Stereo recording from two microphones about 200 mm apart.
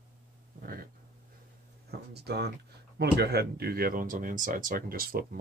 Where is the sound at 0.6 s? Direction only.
45° right (ahead or behind).